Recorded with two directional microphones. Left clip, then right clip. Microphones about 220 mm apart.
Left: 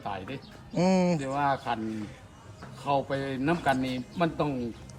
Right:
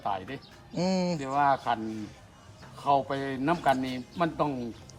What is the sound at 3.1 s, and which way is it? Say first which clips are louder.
Speech: even; 35° right (ahead or behind).